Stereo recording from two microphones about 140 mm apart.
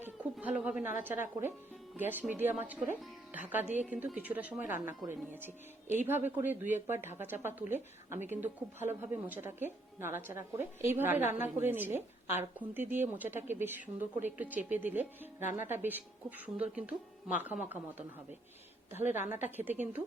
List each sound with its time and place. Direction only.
0.0 s a woman's voice: 10° right (ahead or behind)
19.1 s a woman's voice: 60° left (ahead or behind)
19.5 s a woman's voice: 15° right (ahead or behind)